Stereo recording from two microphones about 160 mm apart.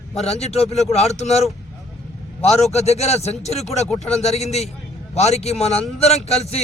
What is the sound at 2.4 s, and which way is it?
A man's voice, 45° left (ahead or behind).